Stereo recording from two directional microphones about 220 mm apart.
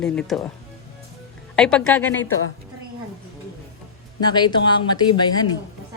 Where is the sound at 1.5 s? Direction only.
5° left (ahead or behind).